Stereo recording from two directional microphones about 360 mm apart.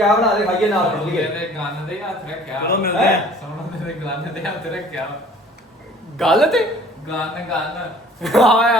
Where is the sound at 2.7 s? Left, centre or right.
Left.